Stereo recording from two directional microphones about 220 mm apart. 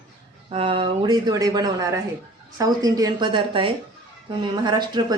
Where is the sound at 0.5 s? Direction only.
25° right (ahead or behind).